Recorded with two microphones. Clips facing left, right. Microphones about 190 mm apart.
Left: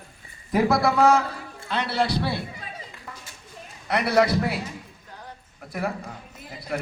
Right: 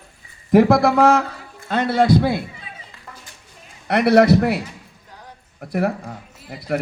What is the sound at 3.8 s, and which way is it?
Speech, 60° right (ahead or behind).